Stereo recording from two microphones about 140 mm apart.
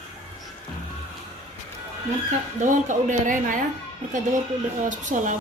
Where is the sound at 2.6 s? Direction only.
65° right (ahead or behind).